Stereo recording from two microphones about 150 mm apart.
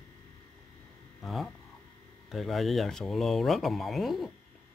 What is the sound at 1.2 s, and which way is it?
Speech, centre (ahead or behind).